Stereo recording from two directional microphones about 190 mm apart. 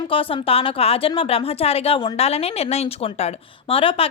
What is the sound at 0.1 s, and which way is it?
A woman's voice, 30° left (ahead or behind).